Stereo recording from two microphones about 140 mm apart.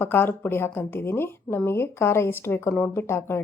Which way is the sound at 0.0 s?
15° left (ahead or behind).